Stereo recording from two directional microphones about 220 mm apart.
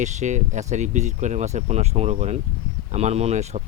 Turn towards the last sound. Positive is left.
turn(degrees=-30)  # may be behind; listen again after turning